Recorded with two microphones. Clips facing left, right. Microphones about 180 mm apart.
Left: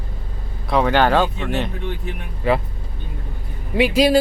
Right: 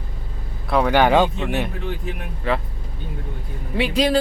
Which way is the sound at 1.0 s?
15° right (ahead or behind).